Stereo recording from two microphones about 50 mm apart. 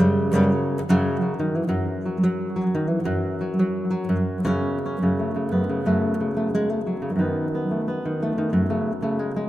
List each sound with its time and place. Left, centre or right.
0.0 s music: centre